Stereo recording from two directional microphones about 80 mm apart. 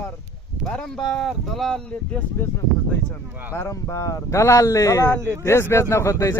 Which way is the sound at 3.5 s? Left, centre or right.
Left.